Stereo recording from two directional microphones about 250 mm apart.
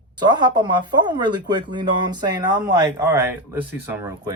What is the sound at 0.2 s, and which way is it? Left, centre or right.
Speech, centre.